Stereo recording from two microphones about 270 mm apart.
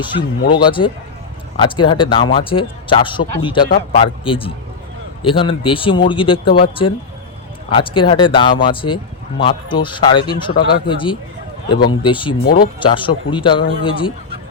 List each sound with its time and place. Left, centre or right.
0.0 s speech: centre